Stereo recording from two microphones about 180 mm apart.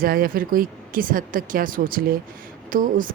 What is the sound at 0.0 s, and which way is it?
A woman's voice, 55° right (ahead or behind).